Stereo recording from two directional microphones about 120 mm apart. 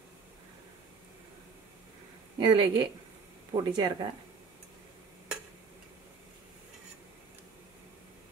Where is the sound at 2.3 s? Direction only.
35° right (ahead or behind).